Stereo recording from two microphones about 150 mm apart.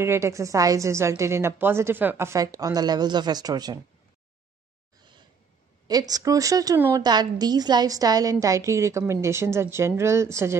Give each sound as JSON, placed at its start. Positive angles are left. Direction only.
{"t": 0.0, "sound": "a woman's voice", "side_deg": -15}
{"t": 5.9, "sound": "a woman's voice", "side_deg": -25}